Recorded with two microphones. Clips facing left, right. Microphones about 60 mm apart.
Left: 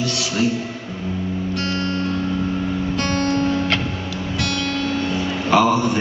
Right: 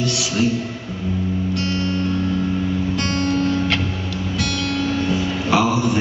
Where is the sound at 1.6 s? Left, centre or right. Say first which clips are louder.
Right 1 dB; centre.